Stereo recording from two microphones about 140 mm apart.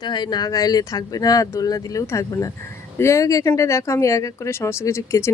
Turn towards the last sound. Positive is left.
turn(degrees=20)  # may be behind; listen again after turning